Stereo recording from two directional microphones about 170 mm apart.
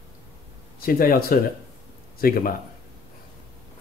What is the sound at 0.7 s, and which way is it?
Speech, 60° left (ahead or behind).